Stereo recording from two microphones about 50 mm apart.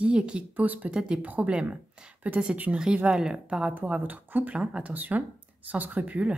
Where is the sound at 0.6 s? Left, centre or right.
Right.